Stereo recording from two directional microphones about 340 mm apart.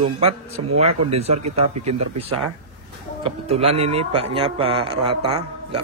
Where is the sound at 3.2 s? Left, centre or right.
Centre.